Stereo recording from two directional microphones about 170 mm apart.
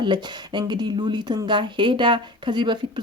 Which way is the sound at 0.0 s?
25° right (ahead or behind).